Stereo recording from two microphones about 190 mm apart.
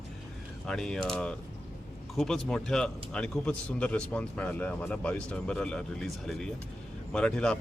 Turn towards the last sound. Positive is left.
turn(degrees=5)  # may be behind; listen again after turning